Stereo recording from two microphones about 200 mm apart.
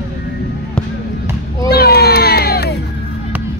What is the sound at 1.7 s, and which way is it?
Crowd, 50° left (ahead or behind).